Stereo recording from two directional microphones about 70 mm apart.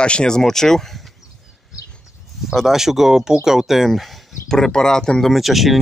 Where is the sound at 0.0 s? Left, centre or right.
Centre.